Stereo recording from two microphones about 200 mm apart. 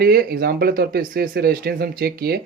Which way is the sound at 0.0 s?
50° right (ahead or behind).